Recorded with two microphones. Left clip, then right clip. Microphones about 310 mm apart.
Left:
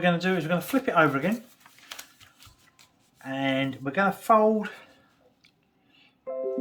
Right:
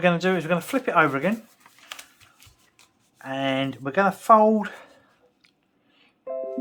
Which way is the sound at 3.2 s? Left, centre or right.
Centre.